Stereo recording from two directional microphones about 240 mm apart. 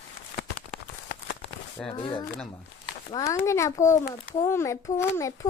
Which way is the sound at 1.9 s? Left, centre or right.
Centre.